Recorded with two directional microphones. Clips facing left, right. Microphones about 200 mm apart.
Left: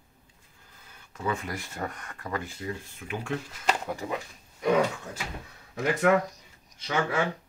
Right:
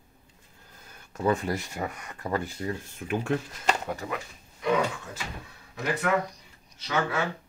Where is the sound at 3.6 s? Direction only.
5° left (ahead or behind).